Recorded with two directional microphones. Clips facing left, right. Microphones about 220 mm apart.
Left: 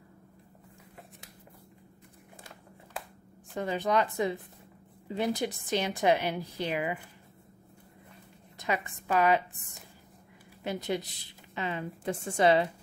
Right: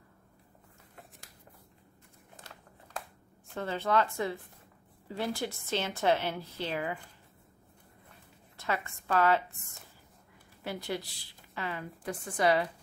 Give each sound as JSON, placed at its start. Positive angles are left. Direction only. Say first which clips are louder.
{"t": 3.5, "sound": "a woman's voice", "louder": "left 1 dB", "side_deg": 15}
{"t": 8.5, "sound": "a woman's voice", "louder": "left 2 dB", "side_deg": 15}
{"t": 10.6, "sound": "a woman's voice", "louder": "left 4 dB", "side_deg": 20}